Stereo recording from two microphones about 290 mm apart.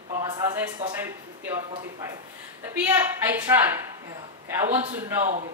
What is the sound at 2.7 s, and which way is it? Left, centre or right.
Speech, centre.